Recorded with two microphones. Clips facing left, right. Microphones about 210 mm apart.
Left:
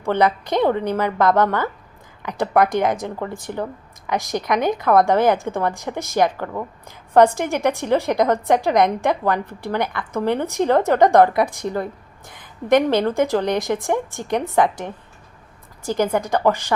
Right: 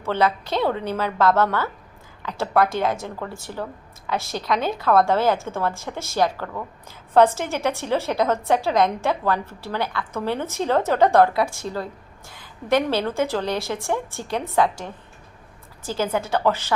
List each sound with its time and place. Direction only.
0.0 s a woman's voice: 15° left (ahead or behind)